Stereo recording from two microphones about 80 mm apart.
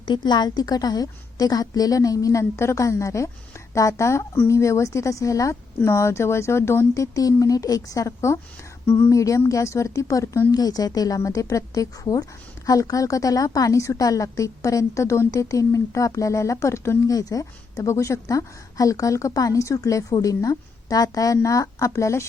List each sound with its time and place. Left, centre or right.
0.0 s a woman's voice: left
10.5 s a woman's voice: left
17.1 s a woman's voice: left